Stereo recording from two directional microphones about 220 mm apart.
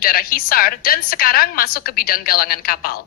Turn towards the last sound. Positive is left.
turn(degrees=40)  # may be behind; listen again after turning